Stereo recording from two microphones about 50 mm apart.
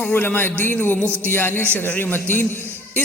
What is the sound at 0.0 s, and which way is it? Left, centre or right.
A man's voice, left.